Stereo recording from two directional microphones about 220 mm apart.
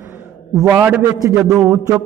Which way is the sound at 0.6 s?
10° right (ahead or behind).